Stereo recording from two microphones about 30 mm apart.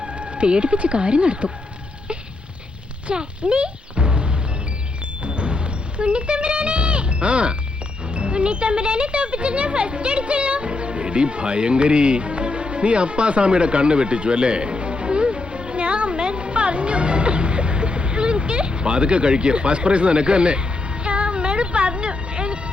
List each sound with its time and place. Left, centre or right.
0.0 s speech: right
3.2 s music: right